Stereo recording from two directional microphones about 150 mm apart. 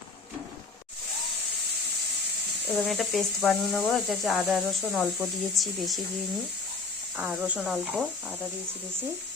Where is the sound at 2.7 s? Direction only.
Centre (ahead or behind).